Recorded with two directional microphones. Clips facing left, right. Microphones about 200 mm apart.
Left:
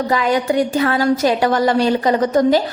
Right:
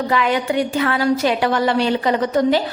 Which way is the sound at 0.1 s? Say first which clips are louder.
Left 2 dB; 40° left (ahead or behind).